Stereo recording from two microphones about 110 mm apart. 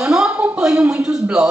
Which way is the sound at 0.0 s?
5° right (ahead or behind).